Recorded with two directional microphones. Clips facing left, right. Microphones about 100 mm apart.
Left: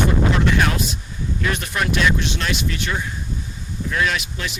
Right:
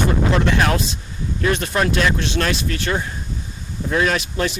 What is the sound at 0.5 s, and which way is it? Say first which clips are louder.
Speech: right 2 dB; 35° right (ahead or behind).